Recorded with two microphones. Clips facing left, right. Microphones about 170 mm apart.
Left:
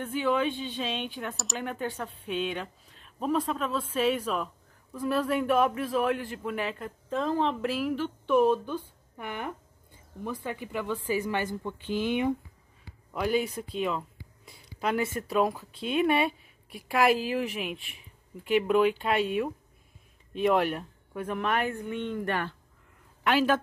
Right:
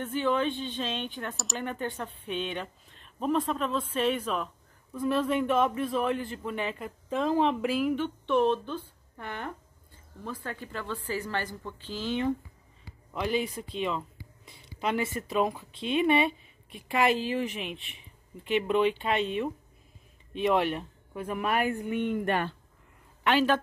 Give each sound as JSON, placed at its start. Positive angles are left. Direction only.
{"t": 0.0, "sound": "speech", "side_deg": 5}
{"t": 23.2, "sound": "speech", "side_deg": 5}